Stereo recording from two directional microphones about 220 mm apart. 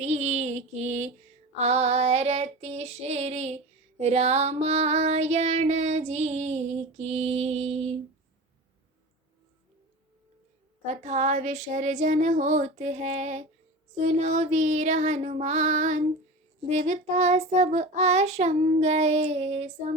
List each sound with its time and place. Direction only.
0.0 s female singing: 30° right (ahead or behind)
10.8 s child singing: 35° right (ahead or behind)